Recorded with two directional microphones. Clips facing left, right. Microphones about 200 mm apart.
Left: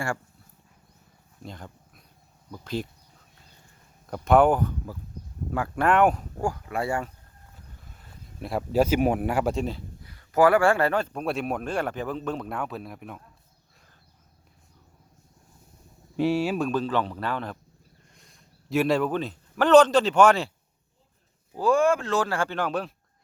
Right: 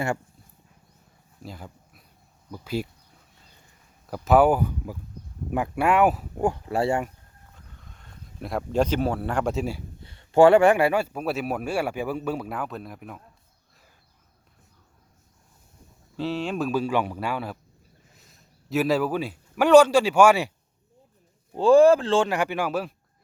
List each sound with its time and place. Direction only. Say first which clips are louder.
1.4 s dog: right 1 dB; 5° right (ahead or behind)
2.5 s speech: right 2 dB; 10° right (ahead or behind)
4.1 s speech: right 1 dB; 5° right (ahead or behind)
5.7 s speech: even; 10° right (ahead or behind)
6.4 s speech: right 5 dB; 25° right (ahead or behind)
7.5 s speech: even; 5° left (ahead or behind)
10.0 s speech: right 4 dB; 25° right (ahead or behind); by 13.2 s centre (ahead or behind)
16.1 s a man's voice: left 4 dB; 10° left (ahead or behind); by 20.5 s 10° right (ahead or behind)
21.5 s speech: right 6 dB; 30° right (ahead or behind)
22.3 s speech: right 2 dB; 15° right (ahead or behind)